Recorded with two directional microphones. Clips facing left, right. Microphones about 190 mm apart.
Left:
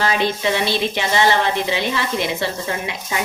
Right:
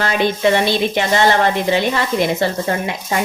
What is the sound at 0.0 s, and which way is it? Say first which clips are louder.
Speech: right 3 dB; 55° right (ahead or behind).